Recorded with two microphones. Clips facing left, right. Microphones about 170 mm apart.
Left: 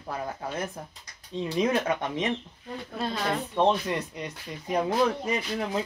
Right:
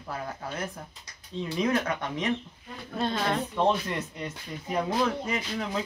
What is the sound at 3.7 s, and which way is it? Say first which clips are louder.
Speech: left 1 dB; 15° left (ahead or behind).